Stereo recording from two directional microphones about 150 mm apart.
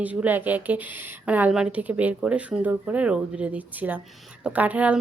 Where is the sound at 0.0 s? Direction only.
10° right (ahead or behind).